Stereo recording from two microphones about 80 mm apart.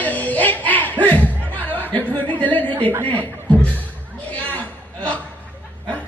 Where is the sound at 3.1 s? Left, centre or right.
Centre.